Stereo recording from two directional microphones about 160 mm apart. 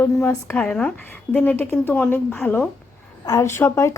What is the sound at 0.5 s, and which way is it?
A woman's voice, 5° left (ahead or behind).